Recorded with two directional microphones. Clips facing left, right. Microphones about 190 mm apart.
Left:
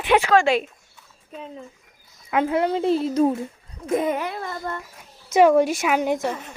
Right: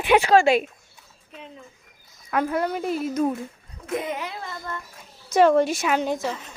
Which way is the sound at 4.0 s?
50° left (ahead or behind).